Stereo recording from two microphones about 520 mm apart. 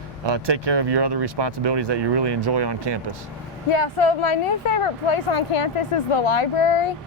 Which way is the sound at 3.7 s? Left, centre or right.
Left.